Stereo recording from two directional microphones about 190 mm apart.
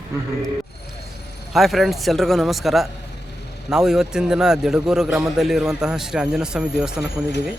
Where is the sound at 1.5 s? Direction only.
Centre (ahead or behind).